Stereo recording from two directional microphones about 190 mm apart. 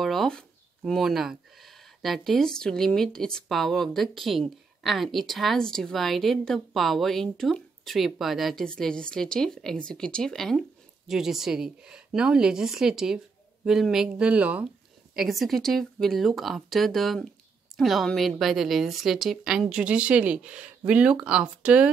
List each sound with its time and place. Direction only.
0.0 s speech: centre (ahead or behind)